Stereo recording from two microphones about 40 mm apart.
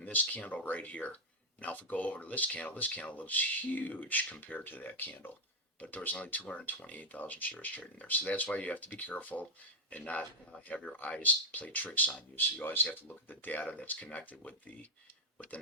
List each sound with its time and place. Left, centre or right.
0.0 s speech: left
5.8 s speech: left